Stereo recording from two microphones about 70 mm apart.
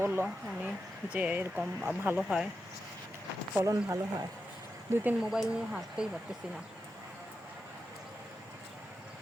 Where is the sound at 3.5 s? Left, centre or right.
Right.